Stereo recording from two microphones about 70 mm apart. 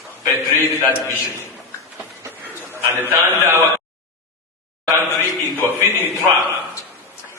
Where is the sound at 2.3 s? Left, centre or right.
Right.